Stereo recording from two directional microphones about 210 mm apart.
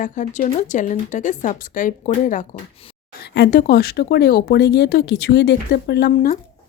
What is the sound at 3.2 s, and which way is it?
A woman's voice, 50° left (ahead or behind).